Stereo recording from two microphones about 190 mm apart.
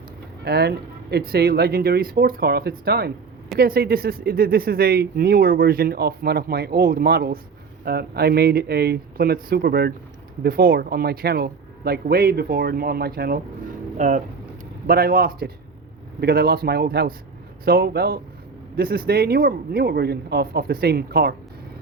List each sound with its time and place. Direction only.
0.4 s speech: 60° right (ahead or behind)
14.0 s speech: 40° right (ahead or behind)